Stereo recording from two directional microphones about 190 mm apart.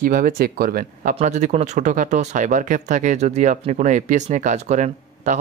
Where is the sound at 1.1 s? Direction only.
40° right (ahead or behind).